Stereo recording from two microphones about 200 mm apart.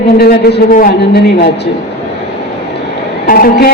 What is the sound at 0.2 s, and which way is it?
A woman's voice, 50° left (ahead or behind).